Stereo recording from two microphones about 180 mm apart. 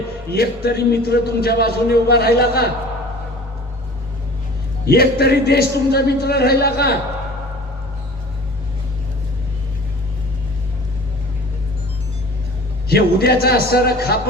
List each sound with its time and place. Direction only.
0.3 s a man's voice: 60° left (ahead or behind)
4.9 s a man's voice: 60° left (ahead or behind)
12.9 s a man's voice: 60° left (ahead or behind)